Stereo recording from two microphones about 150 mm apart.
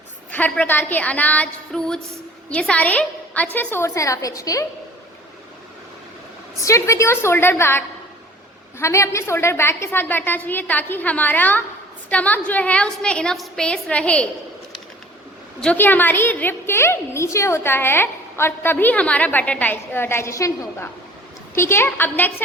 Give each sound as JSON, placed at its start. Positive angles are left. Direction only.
{"t": 0.3, "sound": "a woman's voice", "side_deg": 10}
{"t": 6.6, "sound": "a woman's voice", "side_deg": 20}
{"t": 15.6, "sound": "a woman's voice", "side_deg": 10}